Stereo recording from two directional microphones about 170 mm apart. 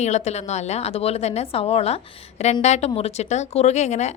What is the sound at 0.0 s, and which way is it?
Speech, 40° left (ahead or behind).